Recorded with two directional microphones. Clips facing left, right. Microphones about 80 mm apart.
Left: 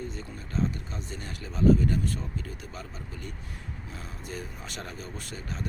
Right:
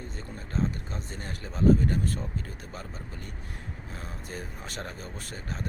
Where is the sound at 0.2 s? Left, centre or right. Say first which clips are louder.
Right 1 dB; right.